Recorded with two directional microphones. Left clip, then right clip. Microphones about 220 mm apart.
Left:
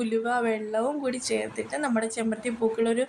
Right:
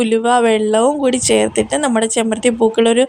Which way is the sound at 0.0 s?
30° right (ahead or behind).